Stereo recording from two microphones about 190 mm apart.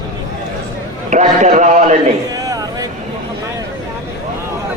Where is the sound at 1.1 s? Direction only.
40° right (ahead or behind).